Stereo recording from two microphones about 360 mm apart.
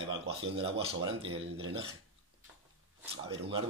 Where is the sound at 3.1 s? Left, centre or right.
Centre.